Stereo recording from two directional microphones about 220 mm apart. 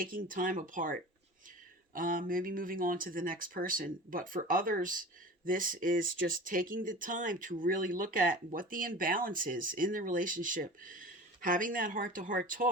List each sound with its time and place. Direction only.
0.0 s speech: 40° right (ahead or behind)